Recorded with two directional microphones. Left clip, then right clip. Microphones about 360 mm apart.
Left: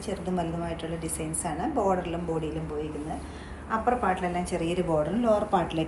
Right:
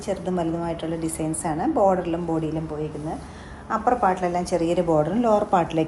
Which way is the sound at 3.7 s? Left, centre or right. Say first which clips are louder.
Right 5 dB; right.